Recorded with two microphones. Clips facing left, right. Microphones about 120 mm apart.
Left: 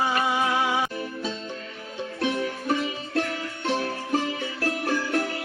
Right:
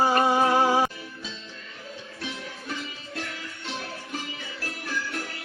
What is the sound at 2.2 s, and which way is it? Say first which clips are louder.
Music: left 12 dB; 60° left (ahead or behind).